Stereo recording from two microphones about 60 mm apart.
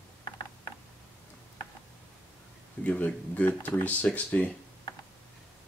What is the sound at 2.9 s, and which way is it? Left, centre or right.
Speech, left.